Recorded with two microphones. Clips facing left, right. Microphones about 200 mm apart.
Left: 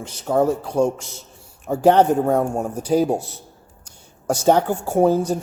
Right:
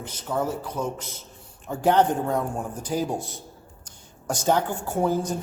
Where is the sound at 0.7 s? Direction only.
10° left (ahead or behind).